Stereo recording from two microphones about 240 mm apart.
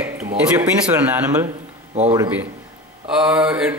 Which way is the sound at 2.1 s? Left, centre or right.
Centre.